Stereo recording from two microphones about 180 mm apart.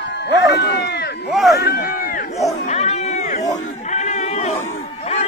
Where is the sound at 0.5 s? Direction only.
65° left (ahead or behind).